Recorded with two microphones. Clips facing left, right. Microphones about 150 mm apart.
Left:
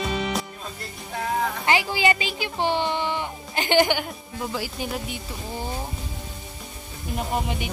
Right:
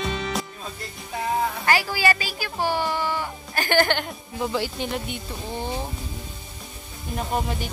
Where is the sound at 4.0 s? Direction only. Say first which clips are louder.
Right 2 dB; 5° left (ahead or behind).